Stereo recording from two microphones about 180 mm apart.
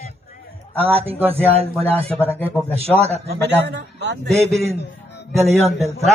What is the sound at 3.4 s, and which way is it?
Speech, 70° right (ahead or behind).